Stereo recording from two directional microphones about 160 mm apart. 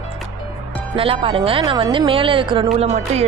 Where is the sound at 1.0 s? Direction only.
35° right (ahead or behind).